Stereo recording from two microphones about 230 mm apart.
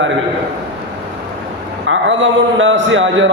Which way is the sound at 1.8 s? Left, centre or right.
Right.